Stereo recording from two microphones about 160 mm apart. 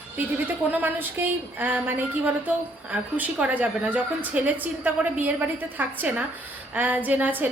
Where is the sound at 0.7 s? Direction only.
10° right (ahead or behind).